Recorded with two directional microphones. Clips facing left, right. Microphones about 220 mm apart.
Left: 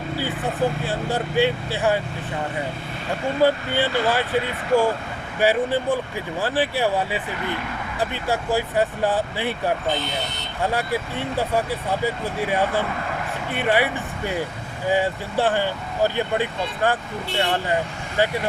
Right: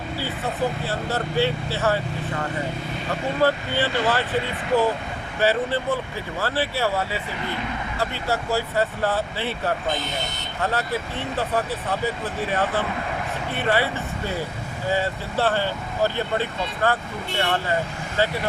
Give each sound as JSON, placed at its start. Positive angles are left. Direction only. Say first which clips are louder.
{"t": 0.9, "sound": "speech", "louder": "left 2 dB", "side_deg": 15}
{"t": 3.4, "sound": "speech", "louder": "left 2 dB", "side_deg": 15}